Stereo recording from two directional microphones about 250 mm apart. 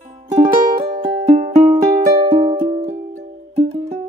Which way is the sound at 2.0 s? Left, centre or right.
Right.